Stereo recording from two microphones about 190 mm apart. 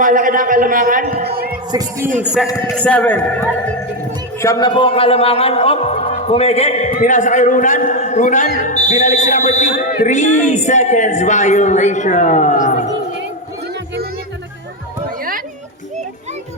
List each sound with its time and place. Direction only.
0.0 s a man's voice: 45° right (ahead or behind)
1.7 s music: 20° right (ahead or behind)
2.4 s music: centre (ahead or behind)
2.8 s a man's voice: 5° left (ahead or behind)
4.4 s a man's voice: 15° left (ahead or behind); by 12.9 s 40° left (ahead or behind)